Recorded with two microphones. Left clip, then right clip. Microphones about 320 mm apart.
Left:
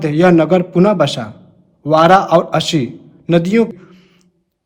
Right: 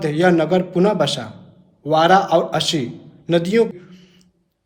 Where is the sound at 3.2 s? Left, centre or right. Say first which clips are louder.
Left 3 dB; left.